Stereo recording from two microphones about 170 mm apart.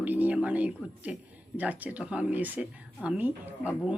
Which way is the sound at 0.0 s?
10° right (ahead or behind).